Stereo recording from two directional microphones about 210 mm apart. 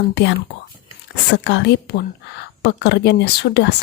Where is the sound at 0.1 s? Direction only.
55° left (ahead or behind).